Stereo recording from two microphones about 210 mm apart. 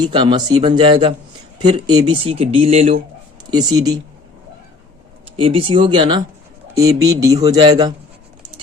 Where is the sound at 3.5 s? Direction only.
20° right (ahead or behind).